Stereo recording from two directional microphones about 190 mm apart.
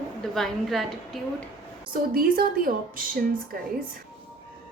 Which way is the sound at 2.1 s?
50° right (ahead or behind).